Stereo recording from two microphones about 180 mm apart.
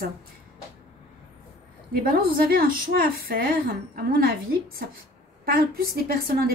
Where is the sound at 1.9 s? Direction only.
55° right (ahead or behind).